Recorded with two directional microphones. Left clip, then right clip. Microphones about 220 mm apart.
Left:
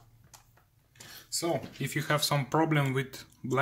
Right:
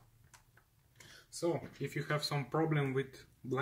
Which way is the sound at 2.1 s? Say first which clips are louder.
Left 9 dB; 50° left (ahead or behind).